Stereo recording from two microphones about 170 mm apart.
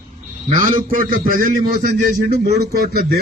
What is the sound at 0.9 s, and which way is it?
A man's voice, 55° right (ahead or behind).